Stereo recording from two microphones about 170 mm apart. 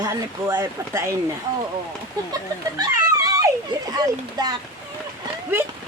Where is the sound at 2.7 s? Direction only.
20° right (ahead or behind).